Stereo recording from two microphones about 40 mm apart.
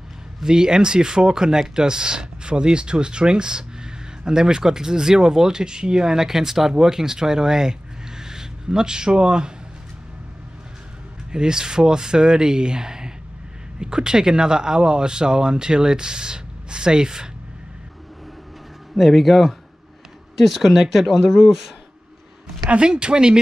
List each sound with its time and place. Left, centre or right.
0.4 s speech: centre
11.3 s speech: centre
18.9 s speech: centre
22.7 s speech: right